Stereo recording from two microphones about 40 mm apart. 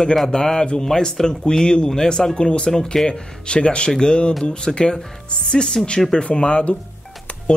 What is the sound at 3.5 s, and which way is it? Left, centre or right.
Speech, left.